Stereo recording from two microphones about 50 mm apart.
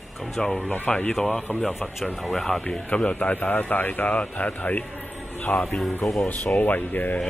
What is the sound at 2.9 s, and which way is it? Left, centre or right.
A man's voice, left.